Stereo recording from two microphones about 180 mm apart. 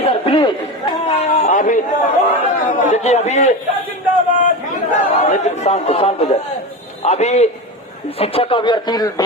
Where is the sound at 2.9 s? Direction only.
40° left (ahead or behind).